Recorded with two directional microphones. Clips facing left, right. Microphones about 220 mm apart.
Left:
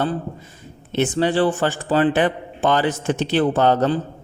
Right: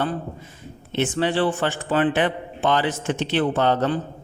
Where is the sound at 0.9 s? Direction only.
40° left (ahead or behind).